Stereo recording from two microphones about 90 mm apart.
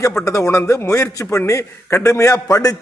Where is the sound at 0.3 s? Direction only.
35° left (ahead or behind).